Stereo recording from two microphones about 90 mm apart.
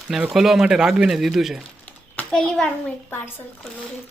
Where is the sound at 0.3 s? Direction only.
5° right (ahead or behind).